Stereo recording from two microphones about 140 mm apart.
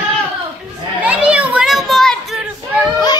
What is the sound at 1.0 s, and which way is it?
Children playing, 10° right (ahead or behind).